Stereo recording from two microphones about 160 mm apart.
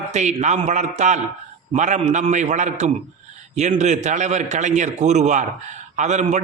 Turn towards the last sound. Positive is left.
turn(degrees=-45)  # may be behind; listen again after turning